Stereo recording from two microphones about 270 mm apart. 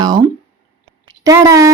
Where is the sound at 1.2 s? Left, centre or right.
Centre.